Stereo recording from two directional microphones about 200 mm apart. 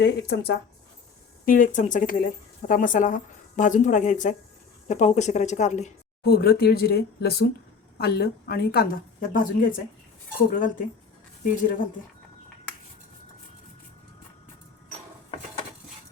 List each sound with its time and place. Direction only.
0.0 s speech: 60° left (ahead or behind)
1.5 s speech: 40° left (ahead or behind)
6.2 s a woman's voice: 50° left (ahead or behind)